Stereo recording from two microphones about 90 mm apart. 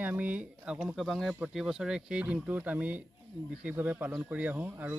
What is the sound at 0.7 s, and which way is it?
Speech, centre (ahead or behind).